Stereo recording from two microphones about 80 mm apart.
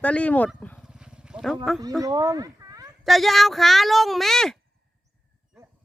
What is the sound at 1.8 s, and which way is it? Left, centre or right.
Speech, right.